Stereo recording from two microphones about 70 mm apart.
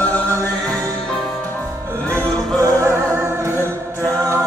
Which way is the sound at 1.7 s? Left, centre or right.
Right.